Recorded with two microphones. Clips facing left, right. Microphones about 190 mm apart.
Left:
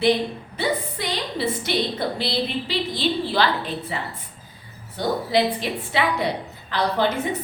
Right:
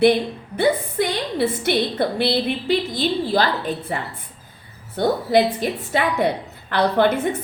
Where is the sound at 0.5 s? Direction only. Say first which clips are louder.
Right 7 dB; 55° right (ahead or behind).